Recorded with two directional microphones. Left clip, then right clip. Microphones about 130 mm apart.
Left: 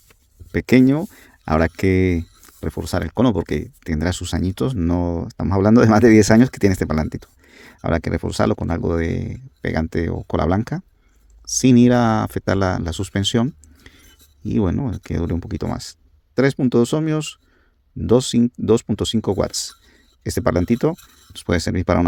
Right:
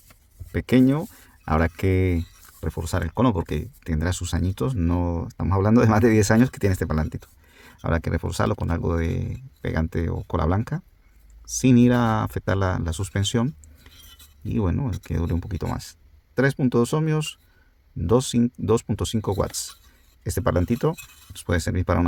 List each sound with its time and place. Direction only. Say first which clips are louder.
0.5 s speech: left 5 dB; 50° left (ahead or behind)